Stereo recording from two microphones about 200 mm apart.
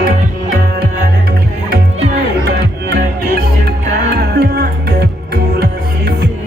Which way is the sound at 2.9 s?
55° right (ahead or behind).